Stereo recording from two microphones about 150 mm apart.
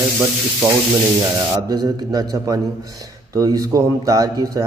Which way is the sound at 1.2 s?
25° right (ahead or behind).